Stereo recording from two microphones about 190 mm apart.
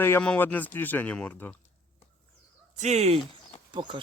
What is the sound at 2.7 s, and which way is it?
Speech, 35° right (ahead or behind).